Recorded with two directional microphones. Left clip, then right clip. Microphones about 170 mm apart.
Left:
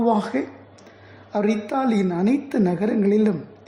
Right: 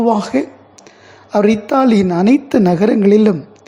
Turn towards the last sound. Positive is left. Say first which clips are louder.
# right 9 dB
turn(degrees=-30)  # may be behind; listen again after turning